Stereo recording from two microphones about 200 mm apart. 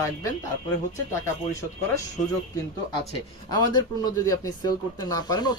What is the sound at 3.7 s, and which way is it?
Speech, 20° left (ahead or behind).